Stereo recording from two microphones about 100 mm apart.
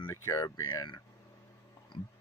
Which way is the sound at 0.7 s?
50° left (ahead or behind).